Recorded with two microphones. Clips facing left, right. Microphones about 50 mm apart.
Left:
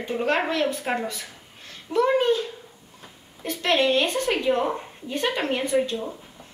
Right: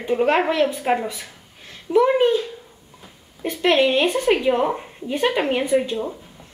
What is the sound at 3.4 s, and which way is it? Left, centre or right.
A woman's voice, centre.